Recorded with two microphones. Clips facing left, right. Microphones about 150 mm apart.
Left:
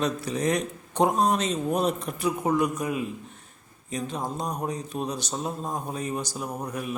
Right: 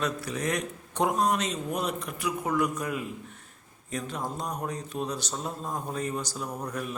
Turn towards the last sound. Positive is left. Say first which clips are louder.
# left 2 dB
turn(degrees=15)  # may be behind; listen again after turning